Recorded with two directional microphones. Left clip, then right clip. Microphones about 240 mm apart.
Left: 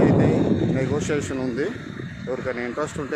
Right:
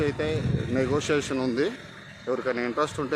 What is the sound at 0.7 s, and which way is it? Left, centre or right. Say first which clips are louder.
Speech: even; centre.